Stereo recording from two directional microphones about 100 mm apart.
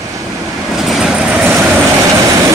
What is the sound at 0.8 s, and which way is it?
Vehicle, 5° right (ahead or behind).